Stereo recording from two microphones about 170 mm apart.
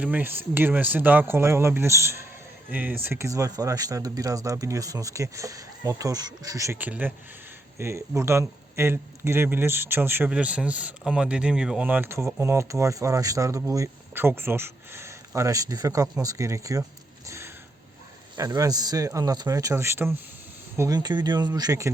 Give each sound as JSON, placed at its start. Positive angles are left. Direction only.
{"t": 0.0, "sound": "speech", "side_deg": -10}
{"t": 17.2, "sound": "a sound", "side_deg": -15}
{"t": 18.3, "sound": "speech", "side_deg": -20}